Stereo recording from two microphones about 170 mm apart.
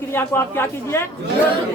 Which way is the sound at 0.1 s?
15° left (ahead or behind).